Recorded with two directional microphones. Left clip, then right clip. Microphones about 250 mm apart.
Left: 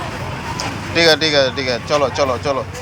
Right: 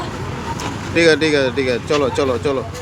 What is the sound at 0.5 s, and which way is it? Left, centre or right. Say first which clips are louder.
Speech: left 1 dB; centre.